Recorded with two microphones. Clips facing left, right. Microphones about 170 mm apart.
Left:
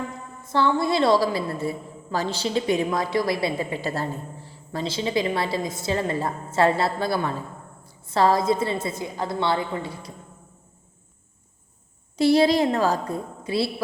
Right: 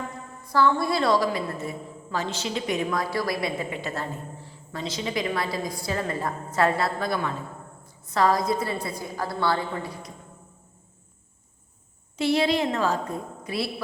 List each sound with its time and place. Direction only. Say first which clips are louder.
0.4 s a woman's voice: left 1 dB; 25° left (ahead or behind)
12.1 s a woman's voice: left 5 dB; 35° left (ahead or behind)